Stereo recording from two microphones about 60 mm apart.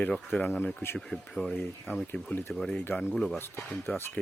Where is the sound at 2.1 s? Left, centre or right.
Left.